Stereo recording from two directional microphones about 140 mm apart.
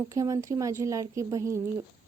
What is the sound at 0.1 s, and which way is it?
A woman's voice, 25° right (ahead or behind).